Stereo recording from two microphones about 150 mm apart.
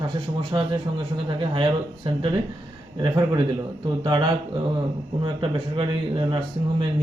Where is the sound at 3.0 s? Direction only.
35° right (ahead or behind).